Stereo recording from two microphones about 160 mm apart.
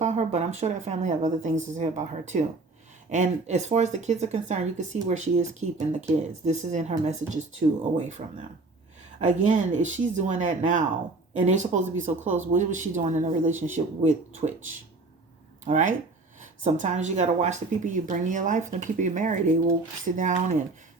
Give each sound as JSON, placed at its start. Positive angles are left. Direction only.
{"t": 0.0, "sound": "speech", "side_deg": -45}
{"t": 9.2, "sound": "speech", "side_deg": -50}
{"t": 15.6, "sound": "speech", "side_deg": -50}